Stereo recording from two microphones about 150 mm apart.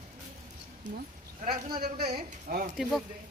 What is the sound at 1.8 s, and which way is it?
Speech, 65° right (ahead or behind).